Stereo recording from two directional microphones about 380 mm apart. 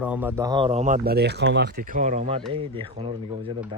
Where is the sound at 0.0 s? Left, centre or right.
Centre.